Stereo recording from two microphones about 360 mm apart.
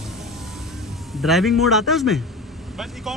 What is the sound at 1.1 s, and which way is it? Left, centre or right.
Speech, centre.